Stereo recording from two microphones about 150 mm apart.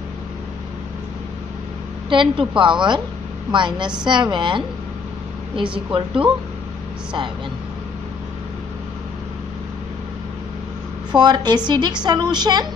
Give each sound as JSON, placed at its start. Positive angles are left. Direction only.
{"t": 2.0, "sound": "a woman's voice", "side_deg": -35}
{"t": 5.9, "sound": "a woman's voice", "side_deg": -35}
{"t": 11.1, "sound": "a woman's voice", "side_deg": -30}